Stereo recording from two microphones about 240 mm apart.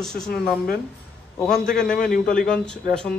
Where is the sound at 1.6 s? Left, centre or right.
Left.